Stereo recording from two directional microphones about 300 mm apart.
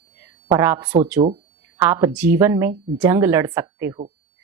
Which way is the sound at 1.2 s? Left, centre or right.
Centre.